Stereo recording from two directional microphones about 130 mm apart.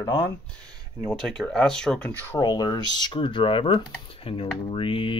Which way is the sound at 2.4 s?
30° left (ahead or behind).